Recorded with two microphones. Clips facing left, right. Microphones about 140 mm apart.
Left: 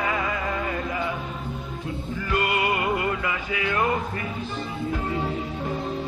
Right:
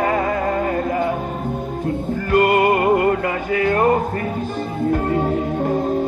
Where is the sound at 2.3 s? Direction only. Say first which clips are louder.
Right 10 dB; 50° right (ahead or behind).